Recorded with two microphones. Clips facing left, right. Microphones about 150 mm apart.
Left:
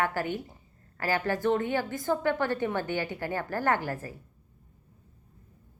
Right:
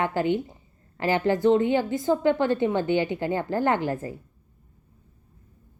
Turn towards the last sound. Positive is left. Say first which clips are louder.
# right 4 dB
turn(degrees=-20)  # may be behind; listen again after turning